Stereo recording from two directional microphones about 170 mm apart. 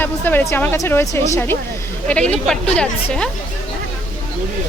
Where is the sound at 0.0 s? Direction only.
10° left (ahead or behind).